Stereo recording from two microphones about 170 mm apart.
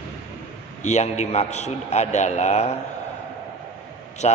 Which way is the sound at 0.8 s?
40° left (ahead or behind).